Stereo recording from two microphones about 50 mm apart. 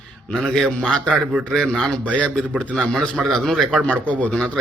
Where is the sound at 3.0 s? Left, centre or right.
Centre.